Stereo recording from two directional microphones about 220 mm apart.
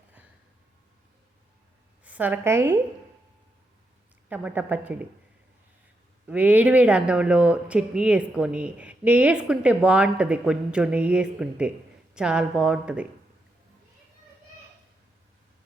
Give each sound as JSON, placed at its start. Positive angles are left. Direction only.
{"t": 2.0, "sound": "a woman's voice", "side_deg": -5}
{"t": 4.3, "sound": "a woman's voice", "side_deg": -5}
{"t": 6.2, "sound": "speech", "side_deg": -5}